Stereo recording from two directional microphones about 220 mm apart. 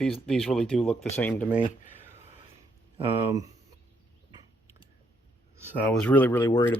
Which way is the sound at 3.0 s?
25° right (ahead or behind).